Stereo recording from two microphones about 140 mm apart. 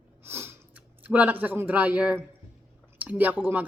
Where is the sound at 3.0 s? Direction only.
10° right (ahead or behind).